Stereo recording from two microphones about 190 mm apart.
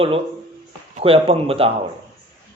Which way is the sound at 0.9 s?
30° right (ahead or behind).